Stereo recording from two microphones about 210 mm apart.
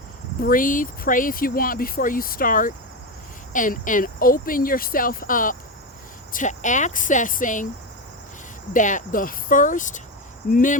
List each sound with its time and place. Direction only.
0.3 s speech: 40° left (ahead or behind)
8.7 s speech: 35° left (ahead or behind)